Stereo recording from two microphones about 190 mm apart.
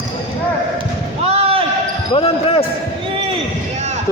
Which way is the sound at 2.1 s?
30° left (ahead or behind).